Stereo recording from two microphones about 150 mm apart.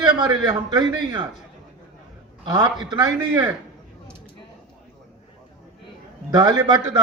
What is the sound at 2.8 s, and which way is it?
Speech, 30° right (ahead or behind).